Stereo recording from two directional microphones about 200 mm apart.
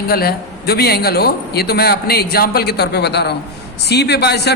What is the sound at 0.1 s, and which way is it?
A man's voice, 50° left (ahead or behind).